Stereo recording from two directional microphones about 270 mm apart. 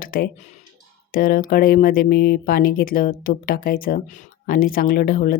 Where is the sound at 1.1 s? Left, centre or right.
Left.